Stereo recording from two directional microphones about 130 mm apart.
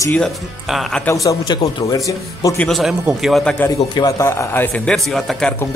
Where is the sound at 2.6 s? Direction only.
Centre (ahead or behind).